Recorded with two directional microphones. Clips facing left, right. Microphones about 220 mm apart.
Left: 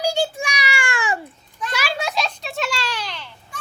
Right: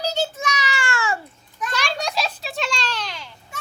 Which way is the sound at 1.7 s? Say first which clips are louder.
Left 1 dB; 5° left (ahead or behind).